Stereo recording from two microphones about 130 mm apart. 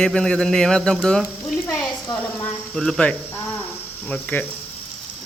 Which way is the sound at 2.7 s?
5° left (ahead or behind).